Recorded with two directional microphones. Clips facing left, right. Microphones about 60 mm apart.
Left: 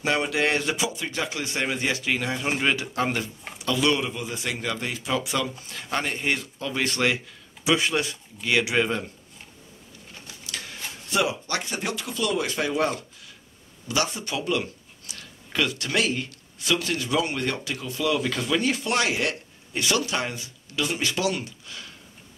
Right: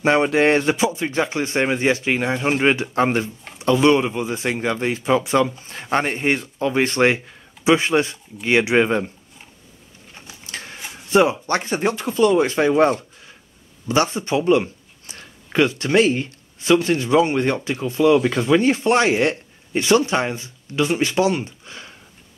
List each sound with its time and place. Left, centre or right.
0.0 s speech: right
10.1 s printer: right
11.1 s speech: right